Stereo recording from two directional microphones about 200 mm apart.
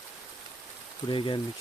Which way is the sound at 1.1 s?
25° left (ahead or behind).